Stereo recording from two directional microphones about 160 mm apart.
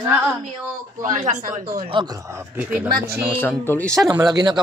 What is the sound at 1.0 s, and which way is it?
Speech, 50° right (ahead or behind).